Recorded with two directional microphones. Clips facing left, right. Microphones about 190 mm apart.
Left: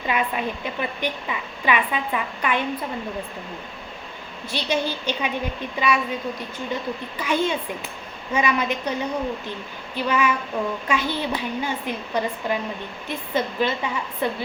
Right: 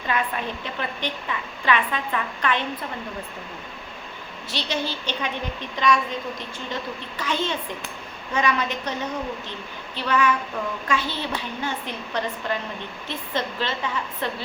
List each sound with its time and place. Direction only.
0.1 s a woman's voice: 10° left (ahead or behind)
4.5 s a woman's voice: 10° left (ahead or behind)
7.2 s a woman's voice: 10° left (ahead or behind)